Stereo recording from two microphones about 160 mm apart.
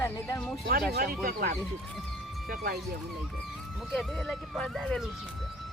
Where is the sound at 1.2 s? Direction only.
70° right (ahead or behind).